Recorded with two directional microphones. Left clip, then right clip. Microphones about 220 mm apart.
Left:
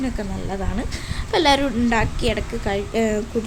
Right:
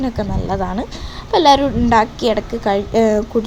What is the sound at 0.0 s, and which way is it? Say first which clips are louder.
A woman's voice: right 6 dB; 15° right (ahead or behind).